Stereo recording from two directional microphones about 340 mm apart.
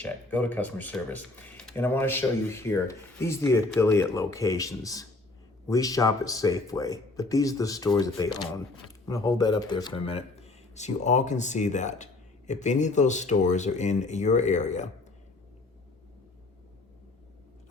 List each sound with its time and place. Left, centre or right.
0.0 s speech: centre; by 14.8 s left